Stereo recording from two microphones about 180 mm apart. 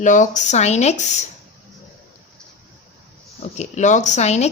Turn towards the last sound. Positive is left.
turn(degrees=40)  # may be behind; listen again after turning